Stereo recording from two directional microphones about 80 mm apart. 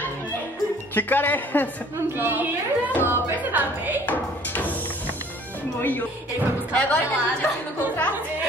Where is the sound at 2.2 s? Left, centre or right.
Right.